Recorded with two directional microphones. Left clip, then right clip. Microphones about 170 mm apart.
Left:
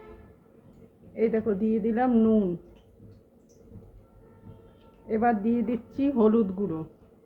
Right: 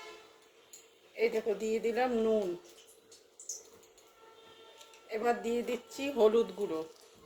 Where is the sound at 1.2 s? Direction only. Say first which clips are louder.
Left 5 dB; 35° left (ahead or behind).